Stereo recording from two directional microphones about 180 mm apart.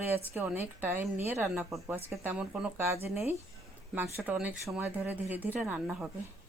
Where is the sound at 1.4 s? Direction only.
Centre (ahead or behind); by 3.1 s 15° right (ahead or behind).